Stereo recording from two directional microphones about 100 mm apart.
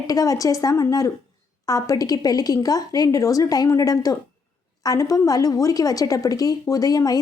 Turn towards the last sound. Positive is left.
turn(degrees=40)  # may be behind; listen again after turning